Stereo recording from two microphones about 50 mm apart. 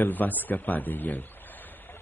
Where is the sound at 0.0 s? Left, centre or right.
Left.